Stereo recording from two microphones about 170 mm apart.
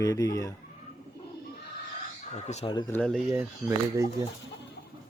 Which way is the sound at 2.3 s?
40° left (ahead or behind).